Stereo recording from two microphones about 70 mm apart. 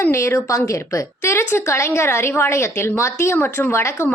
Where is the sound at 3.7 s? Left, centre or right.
Left.